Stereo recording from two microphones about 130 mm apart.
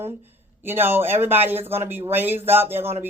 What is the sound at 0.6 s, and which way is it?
Speech, 15° right (ahead or behind).